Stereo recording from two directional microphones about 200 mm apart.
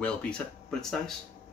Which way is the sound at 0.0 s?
5° left (ahead or behind).